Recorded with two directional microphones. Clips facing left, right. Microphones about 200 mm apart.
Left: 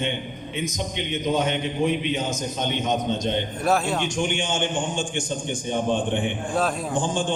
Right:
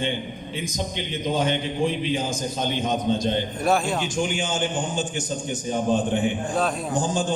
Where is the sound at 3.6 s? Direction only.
Centre (ahead or behind).